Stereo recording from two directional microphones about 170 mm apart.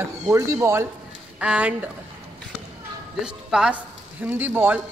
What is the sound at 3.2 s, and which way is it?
A man's voice, 5° right (ahead or behind).